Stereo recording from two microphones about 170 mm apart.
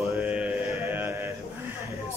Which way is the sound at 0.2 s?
10° right (ahead or behind).